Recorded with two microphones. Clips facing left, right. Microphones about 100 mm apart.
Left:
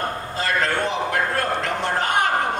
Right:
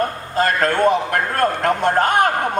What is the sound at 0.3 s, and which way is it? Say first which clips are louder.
A man's voice: right 6 dB; 50° right (ahead or behind).